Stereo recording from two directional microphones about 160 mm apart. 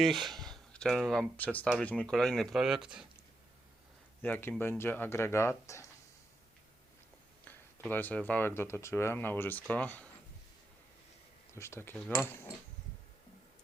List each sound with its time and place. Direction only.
0.0 s speech: centre (ahead or behind)
4.2 s speech: 15° left (ahead or behind)
7.9 s speech: 10° left (ahead or behind)
11.5 s speech: 15° left (ahead or behind)